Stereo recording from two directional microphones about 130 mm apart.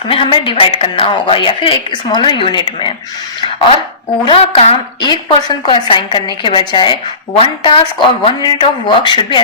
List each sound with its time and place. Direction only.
0.1 s a woman's voice: 45° left (ahead or behind)
4.3 s a woman's voice: 45° left (ahead or behind)